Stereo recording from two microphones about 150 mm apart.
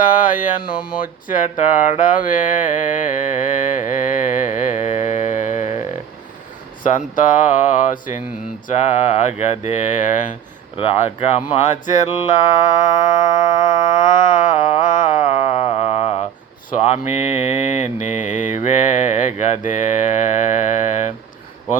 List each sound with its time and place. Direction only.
0.0 s speech: 60° left (ahead or behind)
6.8 s mantra: 60° left (ahead or behind)
8.6 s speech: 55° left (ahead or behind)
10.8 s speech: 45° left (ahead or behind)
11.5 s music: 55° left (ahead or behind)
17.5 s speech: 50° left (ahead or behind)
18.0 s mantra: 15° right (ahead or behind)
18.3 s mantra: 55° left (ahead or behind)